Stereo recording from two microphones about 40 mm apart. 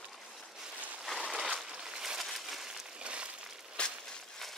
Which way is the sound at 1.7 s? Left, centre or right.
Centre.